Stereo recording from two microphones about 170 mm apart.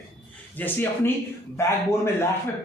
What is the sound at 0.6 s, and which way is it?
Speech, 10° left (ahead or behind).